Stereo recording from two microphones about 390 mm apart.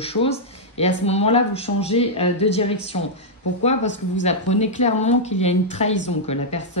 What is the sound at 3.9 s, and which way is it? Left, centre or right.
Speech, centre.